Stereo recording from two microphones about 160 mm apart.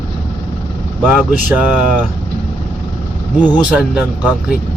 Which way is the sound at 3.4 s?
5° right (ahead or behind).